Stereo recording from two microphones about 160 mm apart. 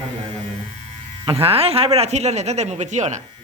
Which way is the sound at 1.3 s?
35° right (ahead or behind).